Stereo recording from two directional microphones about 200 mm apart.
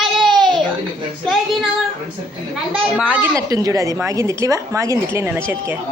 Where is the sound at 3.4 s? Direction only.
20° right (ahead or behind).